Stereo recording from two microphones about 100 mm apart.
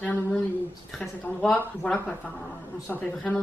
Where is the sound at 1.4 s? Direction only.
10° left (ahead or behind).